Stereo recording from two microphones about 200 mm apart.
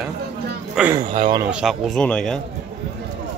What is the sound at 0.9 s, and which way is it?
Speech, 20° right (ahead or behind).